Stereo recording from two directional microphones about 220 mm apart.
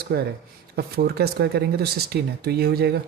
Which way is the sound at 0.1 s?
45° right (ahead or behind).